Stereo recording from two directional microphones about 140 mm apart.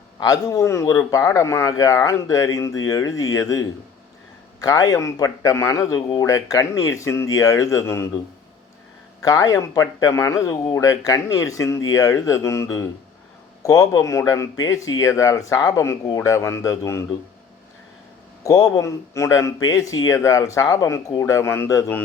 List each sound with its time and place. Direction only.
0.2 s speech: 25° left (ahead or behind)
9.2 s speech: 25° left (ahead or behind)
18.4 s speech: 25° left (ahead or behind)